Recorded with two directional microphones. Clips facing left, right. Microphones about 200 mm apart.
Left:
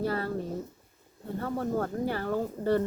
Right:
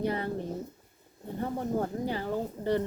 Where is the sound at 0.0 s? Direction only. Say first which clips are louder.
Even; 20° right (ahead or behind).